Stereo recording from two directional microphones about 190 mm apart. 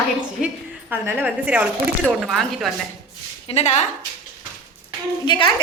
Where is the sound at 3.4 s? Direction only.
35° left (ahead or behind).